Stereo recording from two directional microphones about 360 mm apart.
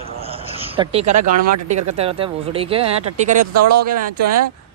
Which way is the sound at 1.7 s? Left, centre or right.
Centre.